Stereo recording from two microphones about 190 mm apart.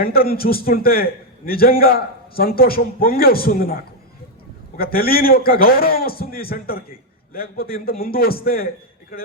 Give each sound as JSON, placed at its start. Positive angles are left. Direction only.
{"t": 0.0, "sound": "a man's voice", "side_deg": 50}